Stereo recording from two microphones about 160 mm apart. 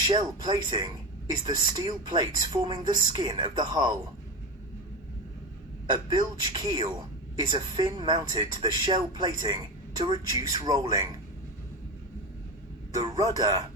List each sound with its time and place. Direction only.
0.1 s speech: 25° right (ahead or behind)
5.9 s speech: 25° right (ahead or behind)
12.9 s speech: 20° right (ahead or behind)